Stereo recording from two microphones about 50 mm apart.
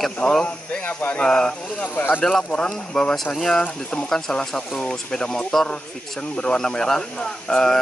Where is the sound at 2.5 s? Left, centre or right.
Centre.